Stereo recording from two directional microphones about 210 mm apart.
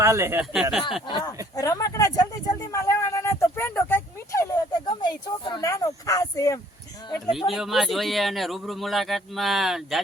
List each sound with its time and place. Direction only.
0.0 s speech: 10° right (ahead or behind)
1.5 s a sound: 15° left (ahead or behind)
7.3 s speech: centre (ahead or behind)